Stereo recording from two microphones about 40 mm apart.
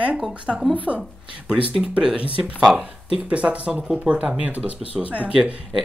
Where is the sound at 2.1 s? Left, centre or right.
Right.